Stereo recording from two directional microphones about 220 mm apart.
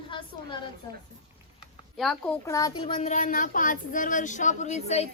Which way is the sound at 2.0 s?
5° left (ahead or behind).